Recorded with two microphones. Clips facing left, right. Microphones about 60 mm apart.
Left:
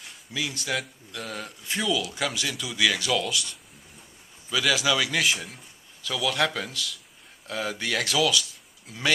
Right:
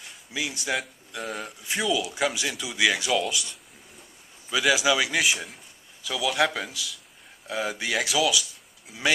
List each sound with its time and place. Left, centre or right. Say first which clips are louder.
0.3 s speech: right 1 dB; centre
3.3 s speech: even; centre
4.5 s speech: right 2 dB; centre